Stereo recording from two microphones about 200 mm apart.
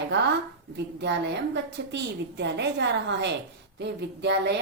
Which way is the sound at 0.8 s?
60° right (ahead or behind).